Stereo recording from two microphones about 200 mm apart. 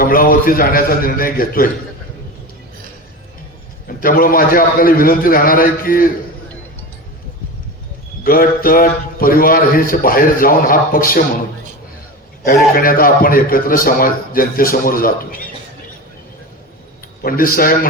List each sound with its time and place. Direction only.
0.0 s a man's voice: 45° left (ahead or behind)
3.8 s a man's voice: 45° left (ahead or behind)
8.2 s a man's voice: 45° left (ahead or behind)
12.7 s a man's voice: 45° left (ahead or behind)
17.2 s a man's voice: 45° left (ahead or behind)